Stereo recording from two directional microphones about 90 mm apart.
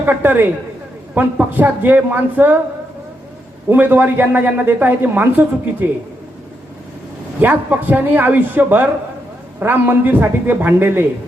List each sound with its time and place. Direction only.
0.0 s a woman's voice: 20° right (ahead or behind)
3.7 s a woman's voice: 20° right (ahead or behind)
7.4 s a woman's voice: 20° right (ahead or behind)